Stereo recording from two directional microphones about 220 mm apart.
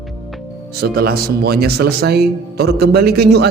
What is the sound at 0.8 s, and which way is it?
A man's voice, 45° right (ahead or behind).